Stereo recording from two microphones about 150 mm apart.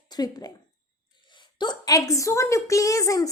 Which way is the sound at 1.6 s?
25° left (ahead or behind).